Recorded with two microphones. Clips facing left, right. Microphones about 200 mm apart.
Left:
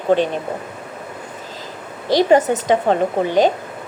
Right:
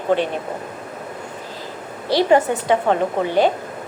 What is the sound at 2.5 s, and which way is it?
Speech, 40° left (ahead or behind).